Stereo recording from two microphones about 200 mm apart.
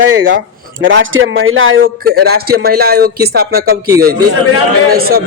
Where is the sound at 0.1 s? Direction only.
70° right (ahead or behind).